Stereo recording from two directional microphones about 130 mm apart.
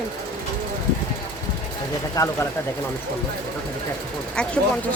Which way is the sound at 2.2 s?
30° left (ahead or behind).